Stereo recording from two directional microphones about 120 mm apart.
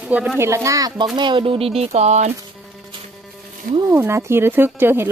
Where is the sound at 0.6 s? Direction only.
30° right (ahead or behind).